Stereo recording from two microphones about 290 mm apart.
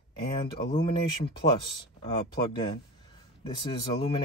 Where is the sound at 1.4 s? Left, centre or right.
Centre.